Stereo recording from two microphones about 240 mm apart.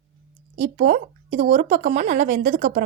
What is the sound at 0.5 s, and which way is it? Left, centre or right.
Speech, right.